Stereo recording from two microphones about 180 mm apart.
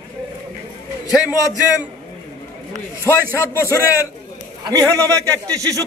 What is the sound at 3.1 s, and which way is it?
Speech, 15° left (ahead or behind).